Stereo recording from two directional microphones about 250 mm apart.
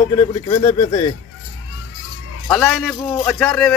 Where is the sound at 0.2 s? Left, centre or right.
Left.